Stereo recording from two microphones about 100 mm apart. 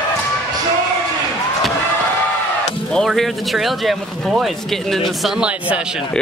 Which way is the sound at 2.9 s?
Centre (ahead or behind).